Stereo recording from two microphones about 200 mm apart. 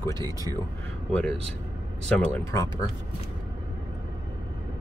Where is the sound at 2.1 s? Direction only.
5° left (ahead or behind).